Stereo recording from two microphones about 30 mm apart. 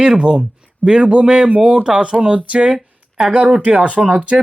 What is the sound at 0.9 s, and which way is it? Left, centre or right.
Speech, right.